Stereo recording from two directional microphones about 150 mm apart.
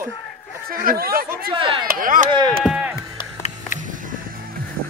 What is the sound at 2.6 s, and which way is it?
Chop, 5° right (ahead or behind).